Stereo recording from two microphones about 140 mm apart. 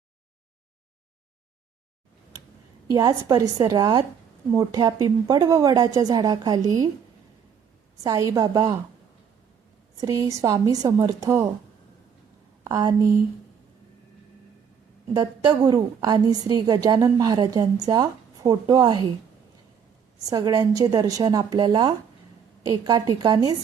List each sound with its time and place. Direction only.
2.9 s a woman's voice: 25° right (ahead or behind)
8.0 s a woman's voice: 25° right (ahead or behind)
10.0 s a woman's voice: 25° right (ahead or behind)
12.6 s speech: 25° right (ahead or behind)
15.1 s a woman's voice: 30° right (ahead or behind)
20.3 s a woman's voice: 25° right (ahead or behind)